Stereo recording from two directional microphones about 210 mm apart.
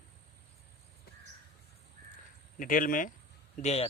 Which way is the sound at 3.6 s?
30° left (ahead or behind).